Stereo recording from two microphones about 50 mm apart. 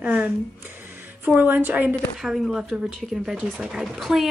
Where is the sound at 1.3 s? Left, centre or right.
Right.